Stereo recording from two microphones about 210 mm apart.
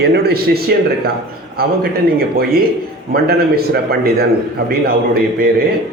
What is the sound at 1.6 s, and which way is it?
A man's voice, 45° right (ahead or behind).